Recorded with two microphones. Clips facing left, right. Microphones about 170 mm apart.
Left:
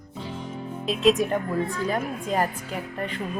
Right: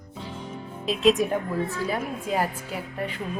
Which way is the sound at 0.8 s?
Centre (ahead or behind).